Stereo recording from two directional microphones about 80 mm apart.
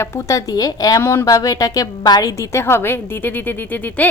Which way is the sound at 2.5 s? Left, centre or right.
Left.